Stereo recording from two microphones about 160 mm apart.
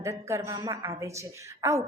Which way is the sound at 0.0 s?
20° right (ahead or behind).